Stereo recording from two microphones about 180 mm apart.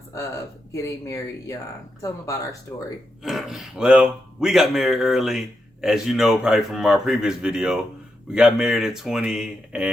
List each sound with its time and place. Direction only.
0.1 s speech: 15° left (ahead or behind)
3.2 s speech: centre (ahead or behind)